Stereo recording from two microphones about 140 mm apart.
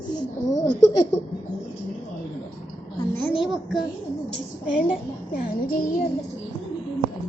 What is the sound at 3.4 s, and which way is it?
Speech, 5° right (ahead or behind).